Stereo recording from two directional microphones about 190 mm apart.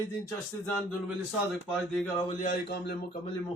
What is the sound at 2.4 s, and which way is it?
Speech, 50° left (ahead or behind).